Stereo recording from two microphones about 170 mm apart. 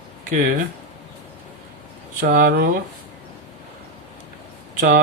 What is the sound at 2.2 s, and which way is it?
Speech, 55° right (ahead or behind).